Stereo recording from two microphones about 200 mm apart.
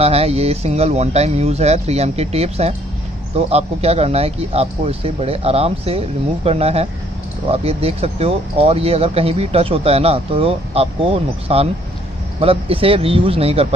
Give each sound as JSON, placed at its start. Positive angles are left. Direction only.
{"t": 0.0, "sound": "speech", "side_deg": -30}